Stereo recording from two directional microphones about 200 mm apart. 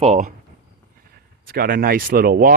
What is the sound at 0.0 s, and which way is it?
Speech, 35° right (ahead or behind).